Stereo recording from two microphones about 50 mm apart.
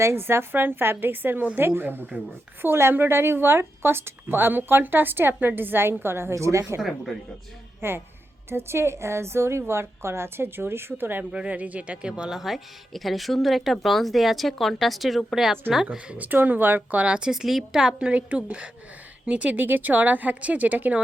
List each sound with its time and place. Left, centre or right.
0.0 s a woman's voice: right
6.3 s a woman's voice: right
6.8 s a woman's voice: centre
7.8 s a woman's voice: right
11.3 s speech: right
12.3 s a woman's voice: centre
16.0 s speech: right
17.0 s a woman's voice: centre
17.4 s a woman's voice: centre; by 21.0 s right